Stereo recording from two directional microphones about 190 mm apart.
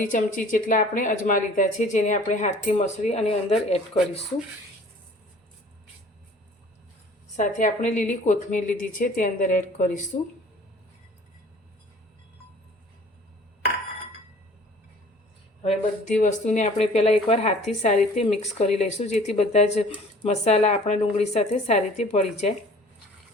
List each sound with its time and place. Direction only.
0.0 s speech: 45° left (ahead or behind)
7.3 s speech: 40° left (ahead or behind)
16.0 s speech: 40° left (ahead or behind)